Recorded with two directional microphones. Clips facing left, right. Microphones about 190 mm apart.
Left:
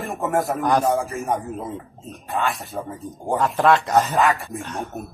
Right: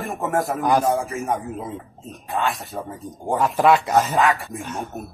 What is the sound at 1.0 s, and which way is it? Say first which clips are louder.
Speech: even; centre (ahead or behind).